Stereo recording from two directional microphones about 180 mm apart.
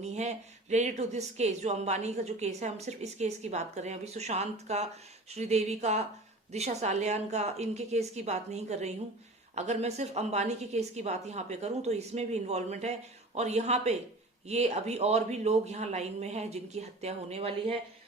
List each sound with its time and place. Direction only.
0.0 s speech: 40° right (ahead or behind)